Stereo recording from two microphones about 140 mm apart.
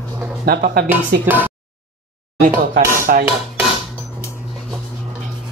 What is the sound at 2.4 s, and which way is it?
Speech, 80° right.